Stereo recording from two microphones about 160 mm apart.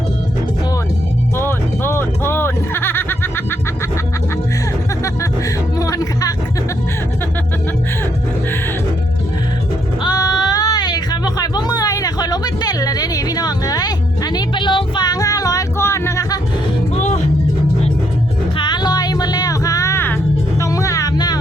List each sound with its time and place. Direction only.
1.4 s music: 15° left (ahead or behind)
5.8 s music: 20° left (ahead or behind)
10.0 s music: 25° left (ahead or behind)
16.9 s music: 45° left (ahead or behind)
18.5 s music: 25° left (ahead or behind)
20.6 s vehicle: 20° left (ahead or behind)